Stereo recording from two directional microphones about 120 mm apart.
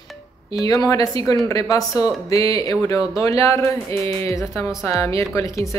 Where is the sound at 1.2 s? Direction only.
30° left (ahead or behind).